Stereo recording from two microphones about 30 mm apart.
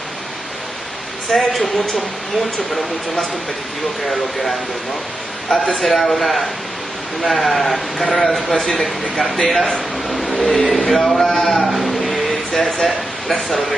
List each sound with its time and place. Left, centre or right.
1.3 s speech: centre
5.5 s speech: centre
5.9 s speech: centre
8.5 s speech: centre
9.5 s a man's voice: centre
11.2 s speech: centre
11.6 s a sound: centre